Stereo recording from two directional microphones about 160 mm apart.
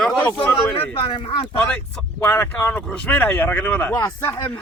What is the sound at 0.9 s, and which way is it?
Speech, 35° left (ahead or behind).